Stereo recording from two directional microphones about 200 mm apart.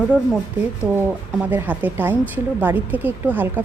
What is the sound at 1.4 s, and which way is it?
A woman's voice, 10° right (ahead or behind).